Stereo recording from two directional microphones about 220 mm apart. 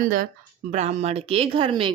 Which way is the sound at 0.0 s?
40° right (ahead or behind).